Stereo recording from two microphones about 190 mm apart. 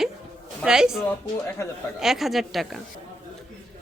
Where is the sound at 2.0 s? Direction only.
Centre (ahead or behind).